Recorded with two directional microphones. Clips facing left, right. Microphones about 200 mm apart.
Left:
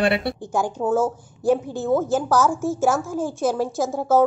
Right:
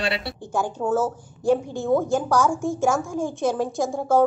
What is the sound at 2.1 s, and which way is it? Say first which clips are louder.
A woman's voice: left 1 dB; 5° left (ahead or behind).